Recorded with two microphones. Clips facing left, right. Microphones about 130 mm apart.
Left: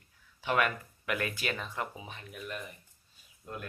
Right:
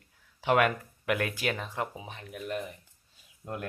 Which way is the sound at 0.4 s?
55° right (ahead or behind).